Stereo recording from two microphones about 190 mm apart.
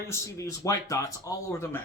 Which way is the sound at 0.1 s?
15° left (ahead or behind).